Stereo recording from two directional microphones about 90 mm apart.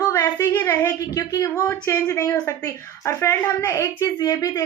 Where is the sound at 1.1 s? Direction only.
45° left (ahead or behind).